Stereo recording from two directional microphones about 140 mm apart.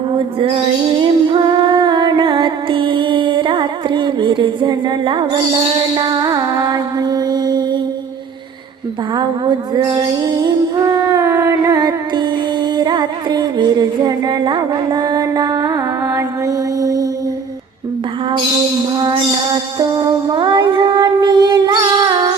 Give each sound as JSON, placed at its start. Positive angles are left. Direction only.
{"t": 0.1, "sound": "music", "side_deg": -40}
{"t": 9.1, "sound": "music", "side_deg": -30}
{"t": 18.9, "sound": "music", "side_deg": -35}